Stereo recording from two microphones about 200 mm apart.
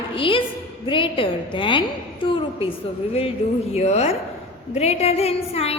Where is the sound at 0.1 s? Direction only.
25° left (ahead or behind).